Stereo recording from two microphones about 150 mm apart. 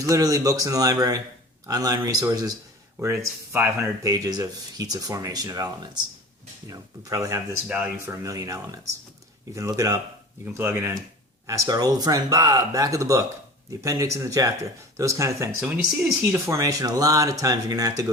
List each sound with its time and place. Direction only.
0.0 s speech: 20° right (ahead or behind)
7.7 s speech: 10° right (ahead or behind)
8.1 s speech: 20° right (ahead or behind)